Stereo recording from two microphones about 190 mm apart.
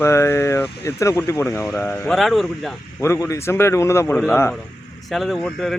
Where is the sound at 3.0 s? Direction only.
15° left (ahead or behind).